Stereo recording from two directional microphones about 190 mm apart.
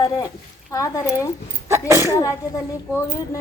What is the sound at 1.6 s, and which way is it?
Speech, 15° right (ahead or behind).